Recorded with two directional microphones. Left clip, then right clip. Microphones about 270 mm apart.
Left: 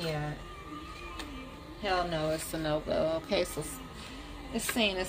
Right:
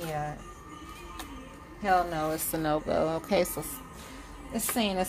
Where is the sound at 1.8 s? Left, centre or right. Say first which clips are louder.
Right 4 dB; right.